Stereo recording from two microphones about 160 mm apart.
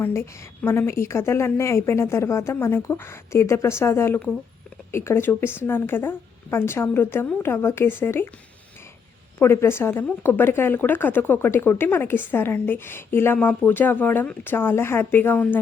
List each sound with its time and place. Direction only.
0.0 s speech: 15° left (ahead or behind)
9.4 s speech: 15° left (ahead or behind)